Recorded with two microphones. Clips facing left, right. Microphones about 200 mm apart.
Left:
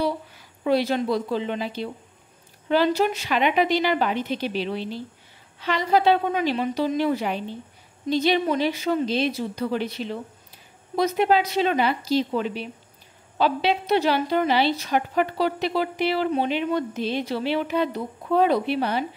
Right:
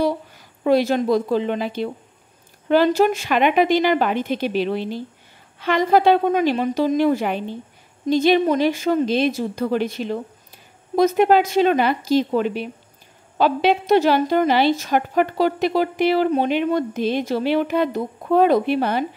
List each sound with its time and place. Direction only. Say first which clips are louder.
0.0 s a woman's voice: right 4 dB; 45° right (ahead or behind)